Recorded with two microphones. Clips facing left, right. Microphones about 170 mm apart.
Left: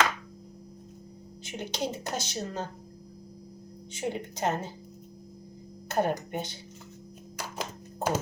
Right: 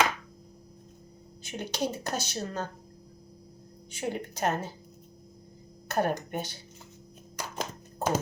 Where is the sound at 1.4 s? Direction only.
20° left (ahead or behind).